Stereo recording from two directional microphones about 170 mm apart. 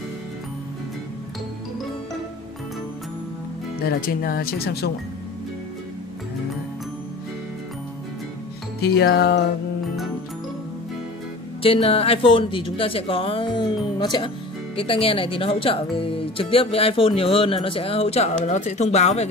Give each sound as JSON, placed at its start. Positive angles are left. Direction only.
{"t": 3.8, "sound": "speech", "side_deg": 60}
{"t": 8.8, "sound": "music", "side_deg": 70}
{"t": 11.6, "sound": "speech", "side_deg": 35}